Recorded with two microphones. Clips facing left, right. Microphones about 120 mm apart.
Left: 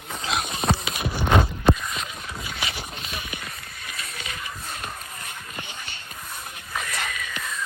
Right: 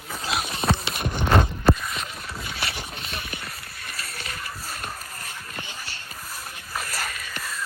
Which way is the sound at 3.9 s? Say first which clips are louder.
Even; centre (ahead or behind).